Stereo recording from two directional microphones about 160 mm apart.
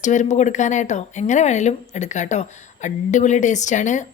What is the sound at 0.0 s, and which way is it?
Speech, 50° left (ahead or behind).